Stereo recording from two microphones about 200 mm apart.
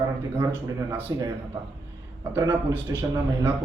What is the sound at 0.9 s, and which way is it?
Speech, 10° right (ahead or behind).